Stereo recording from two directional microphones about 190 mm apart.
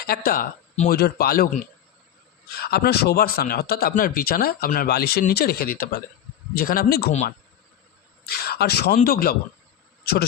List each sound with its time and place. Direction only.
0.1 s a man's voice: 50° left (ahead or behind)
2.6 s a man's voice: 55° left (ahead or behind)
8.3 s a sound: 55° left (ahead or behind)
9.0 s a man's voice: 50° left (ahead or behind)